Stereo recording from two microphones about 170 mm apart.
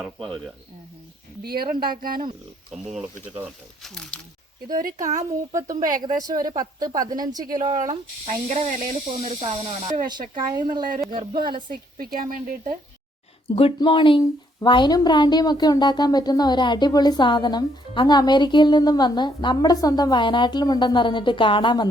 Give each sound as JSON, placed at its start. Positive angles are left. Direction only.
{"t": 0.0, "sound": "speech", "side_deg": 5}
{"t": 1.5, "sound": "speech", "side_deg": -60}
{"t": 2.9, "sound": "speech", "side_deg": -5}
{"t": 4.8, "sound": "speech", "side_deg": -55}
{"t": 5.0, "sound": "speech", "side_deg": -20}
{"t": 8.4, "sound": "speech", "side_deg": -50}
{"t": 10.1, "sound": "speech", "side_deg": -25}
{"t": 11.4, "sound": "speech", "side_deg": -25}
{"t": 11.9, "sound": "speech", "side_deg": -55}
{"t": 13.7, "sound": "a woman's voice", "side_deg": 30}